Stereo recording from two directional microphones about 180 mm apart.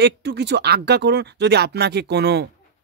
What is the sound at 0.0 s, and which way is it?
Speech, 70° right (ahead or behind).